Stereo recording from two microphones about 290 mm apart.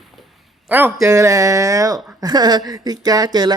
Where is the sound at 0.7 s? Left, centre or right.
Centre.